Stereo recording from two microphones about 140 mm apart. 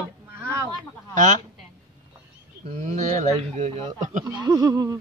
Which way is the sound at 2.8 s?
55° right (ahead or behind).